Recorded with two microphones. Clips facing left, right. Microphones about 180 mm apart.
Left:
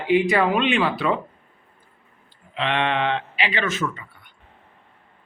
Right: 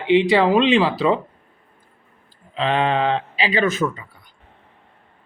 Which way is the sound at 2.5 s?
35° right (ahead or behind).